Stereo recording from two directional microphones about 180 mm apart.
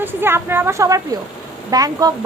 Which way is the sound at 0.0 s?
10° right (ahead or behind).